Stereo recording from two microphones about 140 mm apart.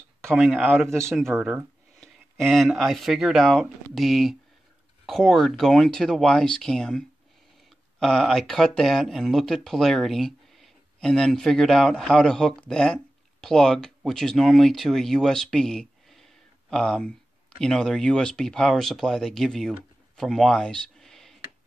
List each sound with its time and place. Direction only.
0.3 s speech: centre (ahead or behind)
0.7 s a man's voice: 15° right (ahead or behind)
1.1 s speech: centre (ahead or behind)
20.2 s a sound: 5° left (ahead or behind)